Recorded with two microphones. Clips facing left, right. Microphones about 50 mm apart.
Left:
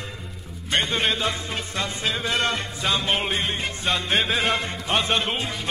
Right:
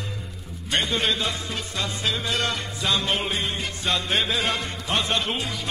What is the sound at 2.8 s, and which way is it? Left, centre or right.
Music, centre.